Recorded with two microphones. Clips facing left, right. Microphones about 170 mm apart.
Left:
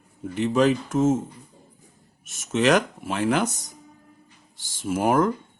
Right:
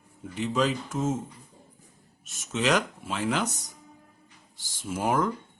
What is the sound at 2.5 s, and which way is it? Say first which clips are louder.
Speech: left 6 dB; 55° left (ahead or behind).